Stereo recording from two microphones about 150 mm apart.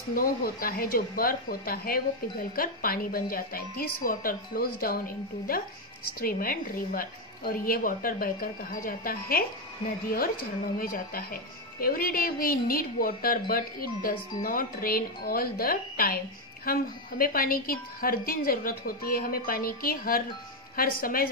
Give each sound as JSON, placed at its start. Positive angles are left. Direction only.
{"t": 0.1, "sound": "a woman's voice", "side_deg": 75}
{"t": 10.8, "sound": "a woman's voice", "side_deg": 75}